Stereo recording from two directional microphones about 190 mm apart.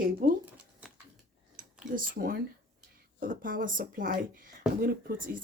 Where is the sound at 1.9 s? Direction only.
50° right (ahead or behind).